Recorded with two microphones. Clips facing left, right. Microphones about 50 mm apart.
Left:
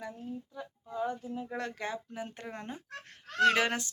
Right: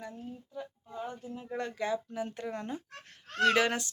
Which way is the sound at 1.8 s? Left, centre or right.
Left.